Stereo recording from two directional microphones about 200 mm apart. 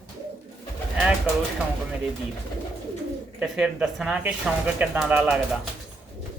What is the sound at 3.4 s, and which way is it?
Speech, 5° right (ahead or behind).